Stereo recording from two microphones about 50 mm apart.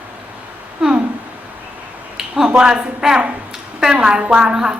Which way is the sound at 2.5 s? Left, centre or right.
Centre.